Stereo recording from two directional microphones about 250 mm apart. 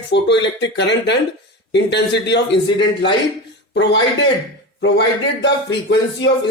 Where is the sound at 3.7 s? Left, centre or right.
Left.